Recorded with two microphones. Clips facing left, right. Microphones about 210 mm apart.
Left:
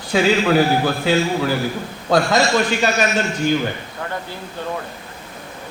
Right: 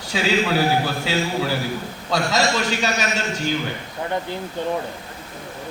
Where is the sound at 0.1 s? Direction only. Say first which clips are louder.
Left 5 dB; 55° left (ahead or behind).